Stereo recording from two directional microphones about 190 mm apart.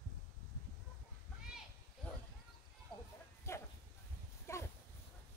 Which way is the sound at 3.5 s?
15° left (ahead or behind).